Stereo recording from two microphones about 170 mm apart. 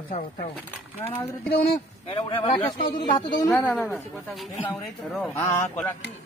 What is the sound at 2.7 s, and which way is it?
Speech, 60° left (ahead or behind).